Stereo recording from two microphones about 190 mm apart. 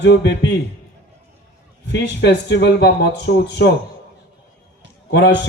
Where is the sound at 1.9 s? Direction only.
65° left (ahead or behind).